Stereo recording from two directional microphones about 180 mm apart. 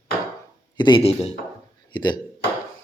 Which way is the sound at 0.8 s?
25° left (ahead or behind).